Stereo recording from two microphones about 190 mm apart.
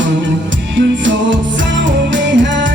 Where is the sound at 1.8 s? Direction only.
75° right (ahead or behind).